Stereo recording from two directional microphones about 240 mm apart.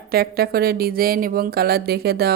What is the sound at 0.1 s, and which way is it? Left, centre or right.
Speech, right.